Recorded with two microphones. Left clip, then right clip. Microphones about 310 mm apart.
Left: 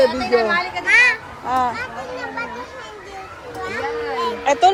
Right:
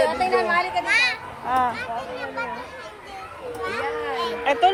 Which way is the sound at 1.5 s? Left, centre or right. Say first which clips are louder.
Left 2 dB; centre.